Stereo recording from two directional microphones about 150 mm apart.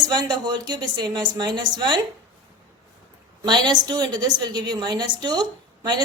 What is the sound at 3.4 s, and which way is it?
A woman's voice, 30° right (ahead or behind).